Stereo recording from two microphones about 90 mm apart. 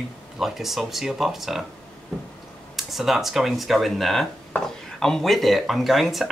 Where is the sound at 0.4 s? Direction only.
5° right (ahead or behind).